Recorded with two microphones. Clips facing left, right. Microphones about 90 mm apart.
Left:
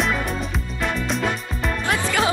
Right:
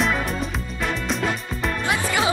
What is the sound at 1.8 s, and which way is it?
Music, 15° right (ahead or behind).